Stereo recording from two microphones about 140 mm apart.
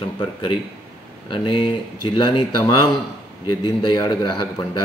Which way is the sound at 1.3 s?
35° left (ahead or behind).